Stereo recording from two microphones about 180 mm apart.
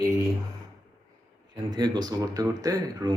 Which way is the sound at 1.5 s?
25° right (ahead or behind).